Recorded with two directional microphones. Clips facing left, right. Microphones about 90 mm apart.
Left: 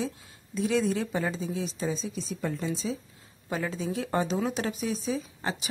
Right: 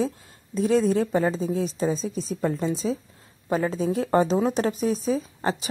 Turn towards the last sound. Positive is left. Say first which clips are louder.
# right 6 dB
turn(degrees=-40)  # may be behind; listen again after turning